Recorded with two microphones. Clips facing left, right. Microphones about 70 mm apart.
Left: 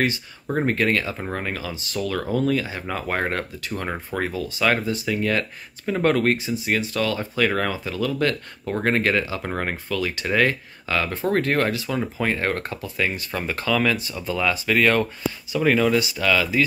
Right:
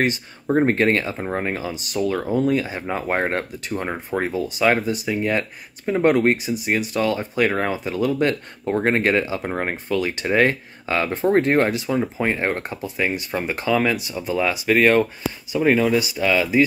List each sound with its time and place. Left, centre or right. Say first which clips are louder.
0.7 s speech: right 3 dB; right